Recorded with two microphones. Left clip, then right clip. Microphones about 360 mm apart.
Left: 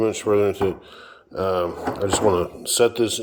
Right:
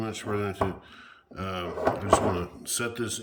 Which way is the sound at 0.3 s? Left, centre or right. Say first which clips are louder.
Left 8 dB; centre.